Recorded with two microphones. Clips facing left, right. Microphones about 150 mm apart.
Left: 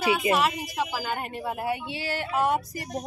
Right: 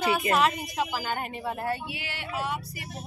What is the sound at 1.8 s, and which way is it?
Vehicle, 35° left (ahead or behind).